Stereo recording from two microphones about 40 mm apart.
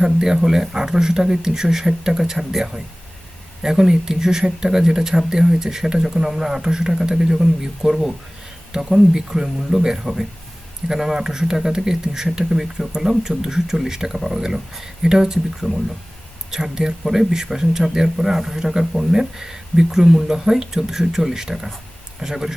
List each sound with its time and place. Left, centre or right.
0.0 s speech: centre